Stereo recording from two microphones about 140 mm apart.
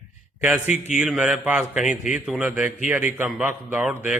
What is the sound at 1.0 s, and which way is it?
Speech, 5° right (ahead or behind).